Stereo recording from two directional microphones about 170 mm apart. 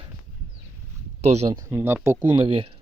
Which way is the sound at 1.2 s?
40° right (ahead or behind).